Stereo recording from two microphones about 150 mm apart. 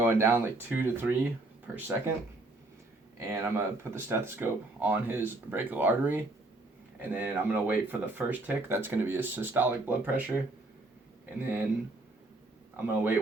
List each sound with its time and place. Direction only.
0.0 s speech: 15° right (ahead or behind)
3.2 s speech: 15° right (ahead or behind)
12.7 s speech: 10° right (ahead or behind)